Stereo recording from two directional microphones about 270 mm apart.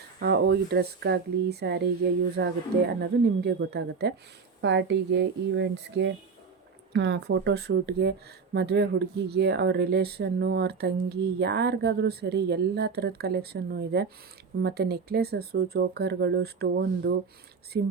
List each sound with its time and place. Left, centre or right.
0.2 s speech: right